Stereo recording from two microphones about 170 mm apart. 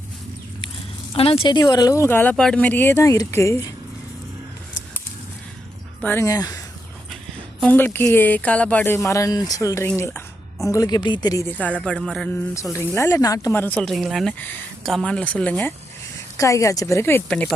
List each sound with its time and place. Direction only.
1.1 s speech: 35° left (ahead or behind); by 3.7 s 15° left (ahead or behind)
6.0 s speech: 15° left (ahead or behind)
7.6 s speech: 10° left (ahead or behind)
12.7 s speech: 15° left (ahead or behind)
14.3 s speech: 10° left (ahead or behind)